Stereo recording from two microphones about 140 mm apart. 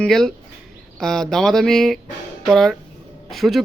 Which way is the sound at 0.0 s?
5° left (ahead or behind).